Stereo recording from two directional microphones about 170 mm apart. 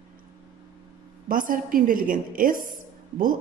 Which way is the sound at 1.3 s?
50° right (ahead or behind).